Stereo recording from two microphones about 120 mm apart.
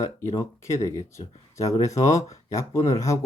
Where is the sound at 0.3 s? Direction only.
25° left (ahead or behind).